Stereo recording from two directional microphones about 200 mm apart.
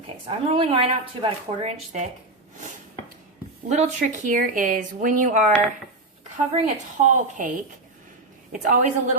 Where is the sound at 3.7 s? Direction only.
35° right (ahead or behind).